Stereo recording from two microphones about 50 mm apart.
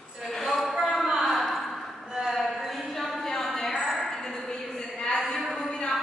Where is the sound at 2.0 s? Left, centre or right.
Centre.